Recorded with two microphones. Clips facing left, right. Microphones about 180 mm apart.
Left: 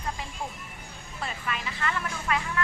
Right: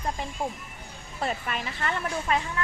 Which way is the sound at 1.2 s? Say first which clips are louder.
Right 3 dB; 45° right (ahead or behind).